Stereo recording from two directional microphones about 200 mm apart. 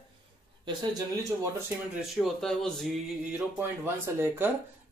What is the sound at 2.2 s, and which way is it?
Speech, centre (ahead or behind).